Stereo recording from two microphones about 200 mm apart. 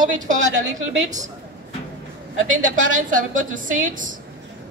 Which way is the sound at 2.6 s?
40° right (ahead or behind).